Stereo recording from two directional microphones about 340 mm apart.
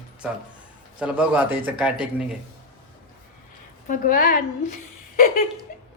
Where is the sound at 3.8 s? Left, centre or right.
Left.